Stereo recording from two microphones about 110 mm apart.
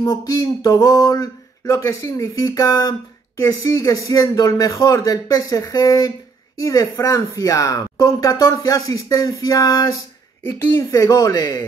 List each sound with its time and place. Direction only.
0.0 s speech: 35° left (ahead or behind)